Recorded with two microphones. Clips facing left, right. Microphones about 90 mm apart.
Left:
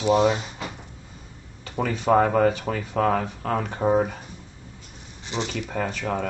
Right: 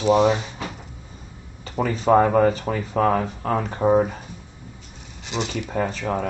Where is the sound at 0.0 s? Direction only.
25° right (ahead or behind).